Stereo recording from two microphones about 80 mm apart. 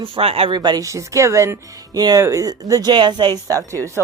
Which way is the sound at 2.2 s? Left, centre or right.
Right.